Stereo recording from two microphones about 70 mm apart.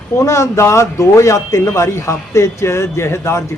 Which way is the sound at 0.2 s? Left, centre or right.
Left.